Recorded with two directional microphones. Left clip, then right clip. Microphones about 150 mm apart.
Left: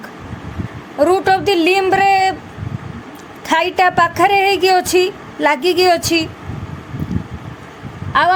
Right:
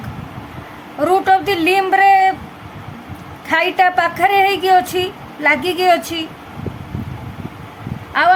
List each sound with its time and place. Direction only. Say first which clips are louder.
0.9 s a woman's voice: even; 25° left (ahead or behind)
3.4 s a woman's voice: even; 35° left (ahead or behind)